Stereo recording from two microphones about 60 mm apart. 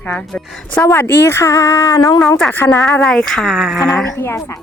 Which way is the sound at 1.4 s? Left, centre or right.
Left.